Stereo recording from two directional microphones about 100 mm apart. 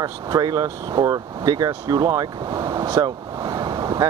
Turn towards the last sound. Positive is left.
turn(degrees=-45)  # may be behind; listen again after turning